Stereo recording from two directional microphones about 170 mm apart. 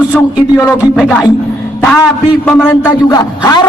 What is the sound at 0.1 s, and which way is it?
A man's voice, 15° left (ahead or behind).